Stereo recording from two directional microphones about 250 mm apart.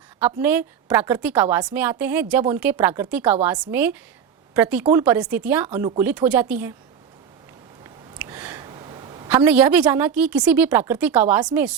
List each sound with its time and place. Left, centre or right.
0.2 s a woman's voice: centre
7.9 s a sound: centre
9.3 s a woman's voice: centre